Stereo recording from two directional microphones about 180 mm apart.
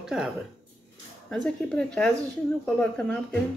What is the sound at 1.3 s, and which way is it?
Speech, 5° left (ahead or behind).